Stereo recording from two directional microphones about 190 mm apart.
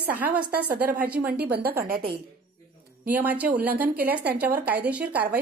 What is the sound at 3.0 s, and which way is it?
A woman's voice, 10° right (ahead or behind).